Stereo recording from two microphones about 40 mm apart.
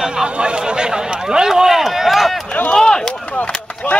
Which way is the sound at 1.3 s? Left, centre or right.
Centre.